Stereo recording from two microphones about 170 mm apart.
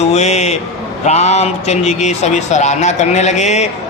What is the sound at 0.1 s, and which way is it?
A man's voice, 40° left (ahead or behind).